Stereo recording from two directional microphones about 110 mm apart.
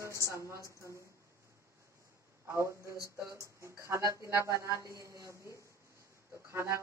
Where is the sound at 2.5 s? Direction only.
25° right (ahead or behind).